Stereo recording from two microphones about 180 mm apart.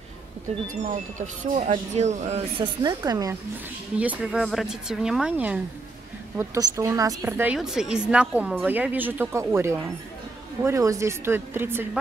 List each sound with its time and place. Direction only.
0.8 s speech: 45° right (ahead or behind)
2.8 s speech: 20° right (ahead or behind)
4.0 s a woman's voice: 5° right (ahead or behind)
6.3 s a woman's voice: 15° right (ahead or behind)